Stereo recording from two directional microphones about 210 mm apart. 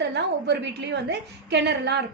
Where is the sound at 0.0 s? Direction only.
55° right (ahead or behind).